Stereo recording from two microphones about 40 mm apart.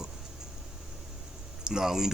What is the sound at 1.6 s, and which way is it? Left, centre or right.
Speech, centre.